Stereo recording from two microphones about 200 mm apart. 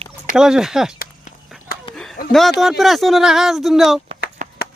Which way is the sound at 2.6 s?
Centre (ahead or behind).